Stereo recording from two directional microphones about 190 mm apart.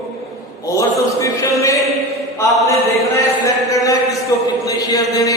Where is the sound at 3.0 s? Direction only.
15° left (ahead or behind).